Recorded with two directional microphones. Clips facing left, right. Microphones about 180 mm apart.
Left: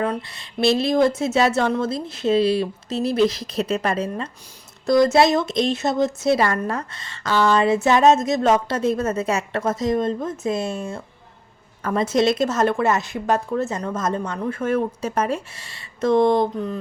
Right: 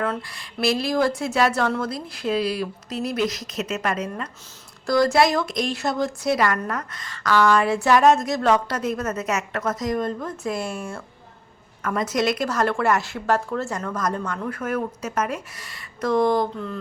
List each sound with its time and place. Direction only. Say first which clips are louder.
0.0 s a woman's voice: left 2 dB; 20° left (ahead or behind)